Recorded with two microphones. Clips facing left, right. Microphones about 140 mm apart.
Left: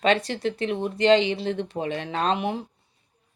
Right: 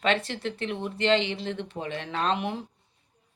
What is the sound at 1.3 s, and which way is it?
Speech, 35° left (ahead or behind).